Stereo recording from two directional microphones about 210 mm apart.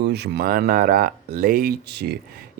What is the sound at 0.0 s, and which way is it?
Speech, 50° right (ahead or behind).